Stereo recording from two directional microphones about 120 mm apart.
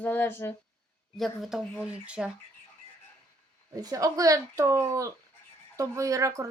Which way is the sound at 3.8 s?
30° right (ahead or behind).